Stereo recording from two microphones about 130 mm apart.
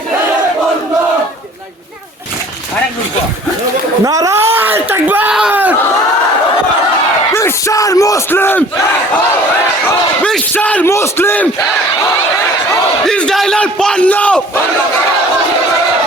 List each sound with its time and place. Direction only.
4.0 s speech: 25° right (ahead or behind)
5.3 s a sound: 10° right (ahead or behind)
7.3 s speech: 25° left (ahead or behind)
10.5 s speech: 10° left (ahead or behind)
13.1 s speech: 5° left (ahead or behind)